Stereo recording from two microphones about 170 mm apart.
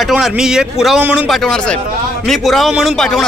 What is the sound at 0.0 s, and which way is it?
A man's voice, centre (ahead or behind).